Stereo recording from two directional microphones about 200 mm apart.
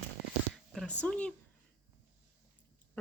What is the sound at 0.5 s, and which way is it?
Speech, centre (ahead or behind).